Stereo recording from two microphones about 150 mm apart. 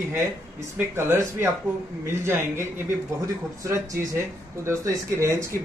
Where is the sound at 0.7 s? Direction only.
15° right (ahead or behind).